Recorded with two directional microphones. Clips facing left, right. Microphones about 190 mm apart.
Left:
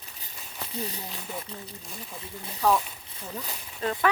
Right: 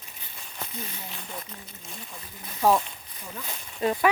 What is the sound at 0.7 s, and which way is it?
Speech, 35° left (ahead or behind).